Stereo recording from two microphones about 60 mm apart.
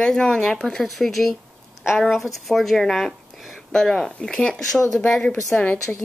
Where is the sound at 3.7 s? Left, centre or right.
Centre.